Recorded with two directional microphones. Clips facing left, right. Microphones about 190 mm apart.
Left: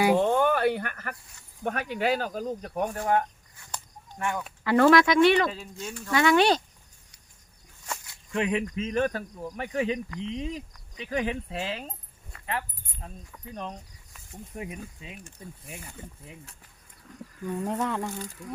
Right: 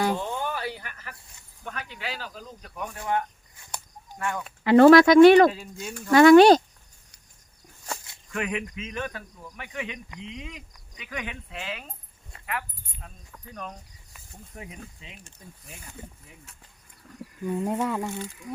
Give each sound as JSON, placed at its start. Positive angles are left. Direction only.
{"t": 0.2, "sound": "snake", "side_deg": 55}
{"t": 1.6, "sound": "speech", "side_deg": 50}
{"t": 4.6, "sound": "speech", "side_deg": -20}
{"t": 4.9, "sound": "speech", "side_deg": -35}
{"t": 5.5, "sound": "speech", "side_deg": -5}
{"t": 5.9, "sound": "speech", "side_deg": -45}
{"t": 7.9, "sound": "a sound", "side_deg": -25}
{"t": 8.3, "sound": "speech", "side_deg": 25}
{"t": 17.4, "sound": "speech", "side_deg": -15}